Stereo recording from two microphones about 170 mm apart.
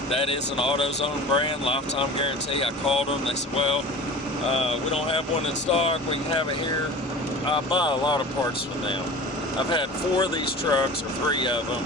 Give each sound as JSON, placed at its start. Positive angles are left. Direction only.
{"t": 0.1, "sound": "speech", "side_deg": 35}
{"t": 7.4, "sound": "speech", "side_deg": 30}
{"t": 9.6, "sound": "speech", "side_deg": 25}